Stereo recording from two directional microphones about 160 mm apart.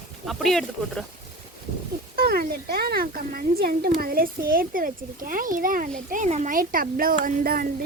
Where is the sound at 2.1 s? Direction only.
70° right (ahead or behind).